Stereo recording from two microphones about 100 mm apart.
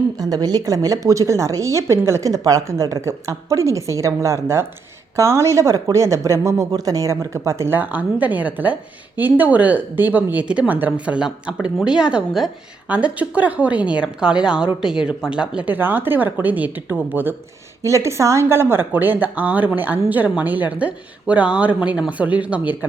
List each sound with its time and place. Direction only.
0.2 s a woman's voice: 40° right (ahead or behind); by 17.0 s 15° right (ahead or behind)
17.8 s speech: 30° right (ahead or behind); by 22.9 s 15° right (ahead or behind)